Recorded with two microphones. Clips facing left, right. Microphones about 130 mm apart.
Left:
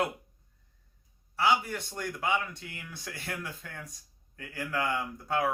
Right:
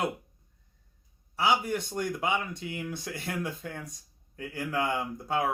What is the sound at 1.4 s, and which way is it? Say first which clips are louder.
Speech: right 1 dB; 15° right (ahead or behind).